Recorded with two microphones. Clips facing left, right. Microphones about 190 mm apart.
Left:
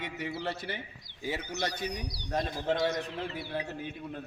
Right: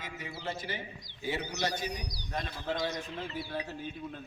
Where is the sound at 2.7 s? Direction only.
55° left (ahead or behind).